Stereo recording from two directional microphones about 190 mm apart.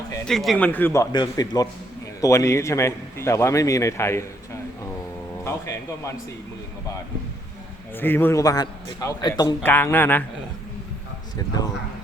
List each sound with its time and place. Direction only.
0.3 s a man's voice: centre (ahead or behind)
1.1 s a man's voice: 20° left (ahead or behind)
5.5 s a man's voice: 15° left (ahead or behind)
7.9 s a man's voice: 10° left (ahead or behind)
9.6 s a man's voice: 10° left (ahead or behind)
11.3 s a man's voice: 20° left (ahead or behind)